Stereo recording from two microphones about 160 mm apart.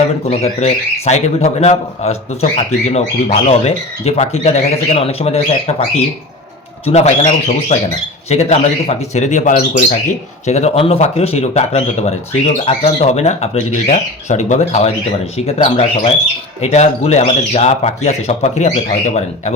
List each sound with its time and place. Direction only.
0.3 s speech: 45° left (ahead or behind)
6.8 s speech: 45° left (ahead or behind)